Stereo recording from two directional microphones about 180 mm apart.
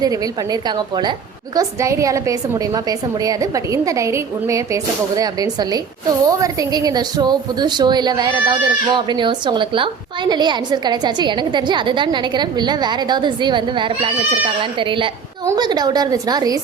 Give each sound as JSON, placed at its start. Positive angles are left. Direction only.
{"t": 0.0, "sound": "a woman's voice", "side_deg": -20}